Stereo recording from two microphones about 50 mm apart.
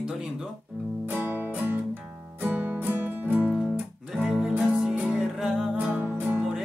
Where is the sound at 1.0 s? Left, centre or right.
Right.